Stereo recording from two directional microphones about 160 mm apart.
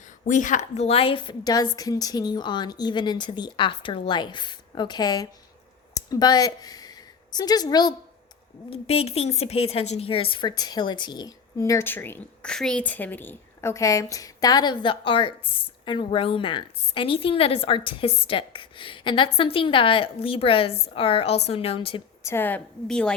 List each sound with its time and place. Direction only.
0.3 s a woman's voice: 50° left (ahead or behind); by 7.9 s 25° left (ahead or behind)
8.7 s a woman's voice: 40° left (ahead or behind)
22.2 s a woman's voice: 15° left (ahead or behind)